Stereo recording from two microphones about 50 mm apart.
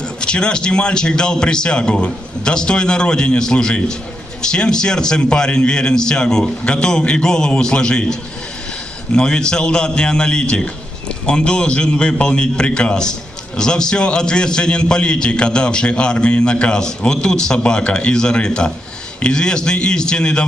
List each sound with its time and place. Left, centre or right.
0.2 s a man's voice: centre